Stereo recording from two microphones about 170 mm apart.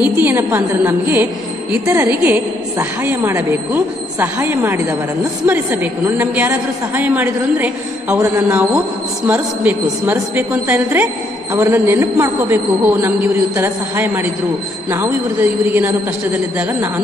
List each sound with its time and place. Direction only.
0.0 s a woman's voice: 10° right (ahead or behind)
15.6 s a woman's voice: 10° right (ahead or behind)